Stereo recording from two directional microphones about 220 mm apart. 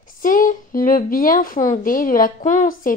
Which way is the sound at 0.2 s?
40° left (ahead or behind).